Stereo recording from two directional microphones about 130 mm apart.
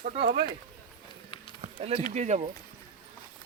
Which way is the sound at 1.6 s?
60° right (ahead or behind).